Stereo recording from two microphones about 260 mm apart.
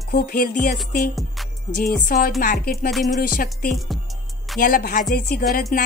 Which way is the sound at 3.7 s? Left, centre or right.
Centre.